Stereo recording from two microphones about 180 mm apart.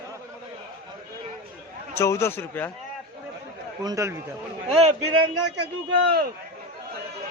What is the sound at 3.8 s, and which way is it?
Speech, 20° right (ahead or behind).